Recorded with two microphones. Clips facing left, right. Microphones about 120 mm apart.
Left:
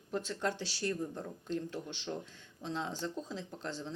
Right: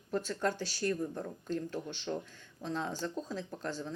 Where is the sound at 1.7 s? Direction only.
45° right (ahead or behind).